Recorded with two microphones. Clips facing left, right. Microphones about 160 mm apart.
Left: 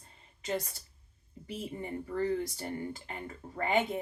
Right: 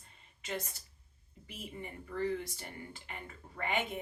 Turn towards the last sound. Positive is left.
turn(degrees=35)  # may be behind; listen again after turning